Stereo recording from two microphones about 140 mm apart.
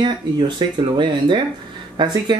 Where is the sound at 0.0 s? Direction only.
35° right (ahead or behind).